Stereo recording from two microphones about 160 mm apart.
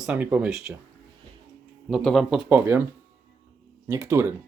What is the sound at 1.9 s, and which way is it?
Speech, centre (ahead or behind).